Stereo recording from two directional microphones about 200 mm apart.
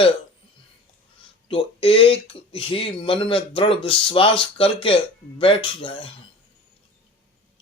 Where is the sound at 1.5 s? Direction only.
25° left (ahead or behind).